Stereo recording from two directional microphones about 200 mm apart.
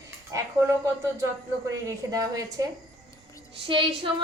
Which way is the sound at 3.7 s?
25° right (ahead or behind).